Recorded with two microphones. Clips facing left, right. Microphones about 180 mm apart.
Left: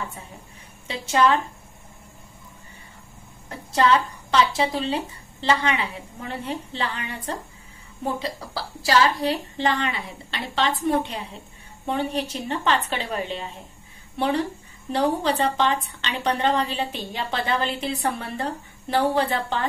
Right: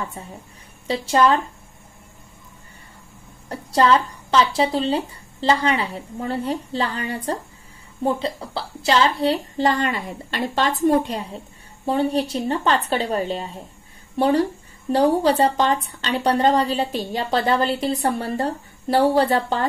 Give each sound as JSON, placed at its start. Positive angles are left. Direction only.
{"t": 0.8, "sound": "a woman's voice", "side_deg": -35}
{"t": 3.4, "sound": "a woman's voice", "side_deg": -35}
{"t": 9.6, "sound": "a woman's voice", "side_deg": -40}